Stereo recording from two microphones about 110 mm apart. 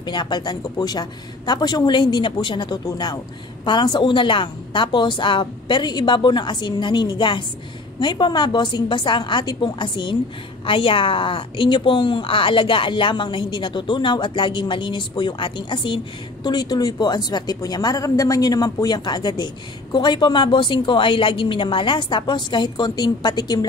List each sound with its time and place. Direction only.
0.0 s a woman's voice: 40° left (ahead or behind)